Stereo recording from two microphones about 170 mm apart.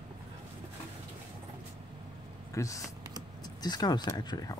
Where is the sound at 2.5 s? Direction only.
20° left (ahead or behind).